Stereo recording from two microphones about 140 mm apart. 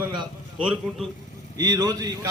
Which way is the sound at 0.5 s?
5° right (ahead or behind).